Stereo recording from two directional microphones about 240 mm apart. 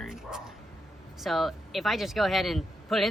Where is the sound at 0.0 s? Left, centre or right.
Centre.